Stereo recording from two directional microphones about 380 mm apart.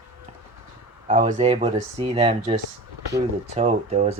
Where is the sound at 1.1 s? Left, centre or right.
Right.